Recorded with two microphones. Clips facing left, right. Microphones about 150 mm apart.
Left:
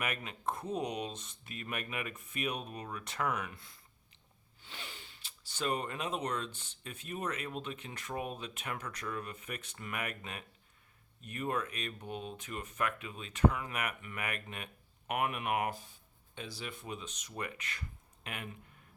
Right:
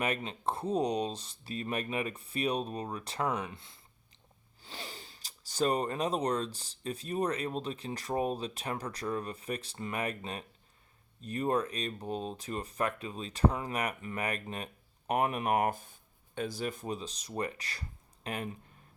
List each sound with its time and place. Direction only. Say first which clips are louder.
0.0 s speech: right 5 dB; 30° right (ahead or behind)
4.6 s speech: right 4 dB; 35° right (ahead or behind)